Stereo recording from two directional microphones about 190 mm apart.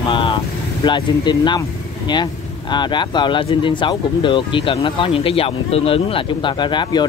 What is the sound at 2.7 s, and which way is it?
Speech, 25° left (ahead or behind).